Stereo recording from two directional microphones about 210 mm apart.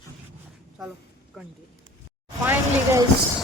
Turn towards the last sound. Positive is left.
turn(degrees=-10)  # may be behind; listen again after turning